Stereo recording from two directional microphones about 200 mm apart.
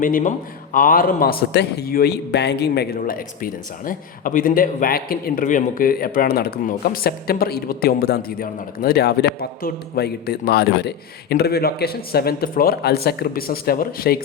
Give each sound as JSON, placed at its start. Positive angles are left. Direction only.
{"t": 0.0, "sound": "a man's voice", "side_deg": 40}